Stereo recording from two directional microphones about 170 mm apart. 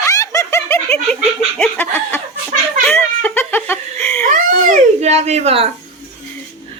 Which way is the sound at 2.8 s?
10° left (ahead or behind).